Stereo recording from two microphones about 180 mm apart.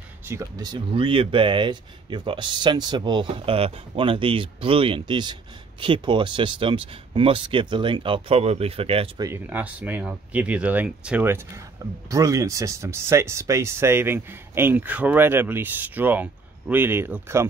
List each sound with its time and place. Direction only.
0.2 s speech: 15° right (ahead or behind); by 9.1 s 30° right (ahead or behind)
9.2 s speech: 10° right (ahead or behind)